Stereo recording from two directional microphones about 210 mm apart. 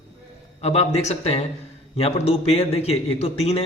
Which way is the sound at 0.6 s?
30° left (ahead or behind).